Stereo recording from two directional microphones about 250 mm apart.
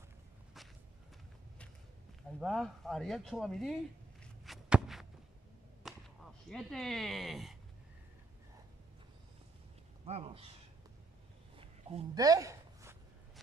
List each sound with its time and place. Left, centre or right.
2.4 s speech: centre
4.2 s walk: centre
5.9 s whip: centre
6.5 s speech: centre
10.0 s speech: right
11.5 s a sound: centre